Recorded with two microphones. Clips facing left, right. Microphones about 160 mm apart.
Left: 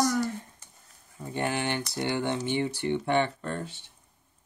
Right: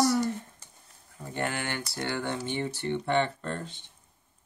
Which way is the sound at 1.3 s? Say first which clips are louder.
Left 3 dB; 20° left (ahead or behind).